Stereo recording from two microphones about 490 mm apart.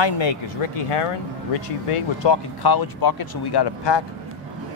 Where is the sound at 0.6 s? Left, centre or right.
Left.